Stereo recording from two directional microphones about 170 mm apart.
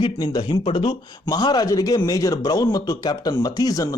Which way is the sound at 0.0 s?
25° left (ahead or behind).